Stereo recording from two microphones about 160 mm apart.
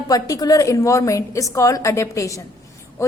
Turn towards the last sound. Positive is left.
turn(degrees=15)  # may be behind; listen again after turning